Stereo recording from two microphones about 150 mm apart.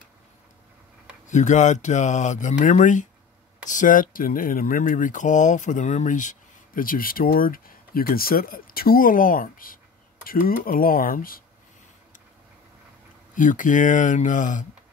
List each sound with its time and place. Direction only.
1.2 s speech: 55° left (ahead or behind); by 11.4 s 75° left (ahead or behind)
13.3 s speech: 60° left (ahead or behind)